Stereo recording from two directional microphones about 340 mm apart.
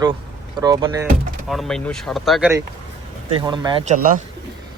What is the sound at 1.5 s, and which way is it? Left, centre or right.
Speech, centre.